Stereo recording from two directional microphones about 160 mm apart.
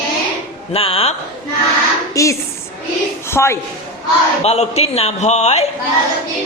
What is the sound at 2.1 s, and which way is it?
A woman's voice, 20° left (ahead or behind).